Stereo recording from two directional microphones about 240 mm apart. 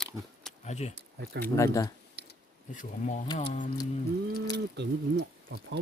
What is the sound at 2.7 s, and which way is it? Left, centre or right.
Speech, left.